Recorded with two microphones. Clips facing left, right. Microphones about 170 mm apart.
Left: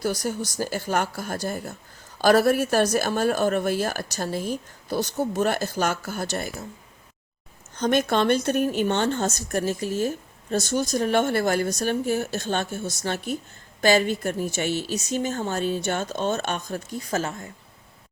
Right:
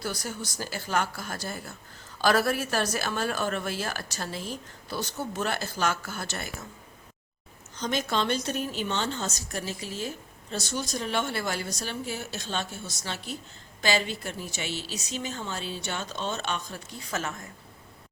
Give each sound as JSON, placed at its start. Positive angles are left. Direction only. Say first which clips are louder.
{"t": 0.0, "sound": "a woman's voice", "louder": "left 8 dB", "side_deg": 45}
{"t": 7.8, "sound": "a woman's voice", "louder": "left 7 dB", "side_deg": 55}